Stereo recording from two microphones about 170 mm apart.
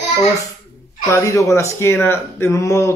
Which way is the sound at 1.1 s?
15° left (ahead or behind).